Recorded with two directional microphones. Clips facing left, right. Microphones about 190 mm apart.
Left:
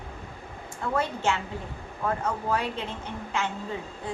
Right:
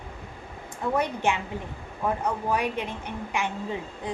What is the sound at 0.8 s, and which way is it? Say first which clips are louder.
A woman's voice: right 2 dB; 15° right (ahead or behind).